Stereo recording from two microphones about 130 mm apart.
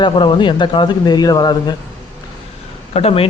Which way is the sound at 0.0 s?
40° left (ahead or behind).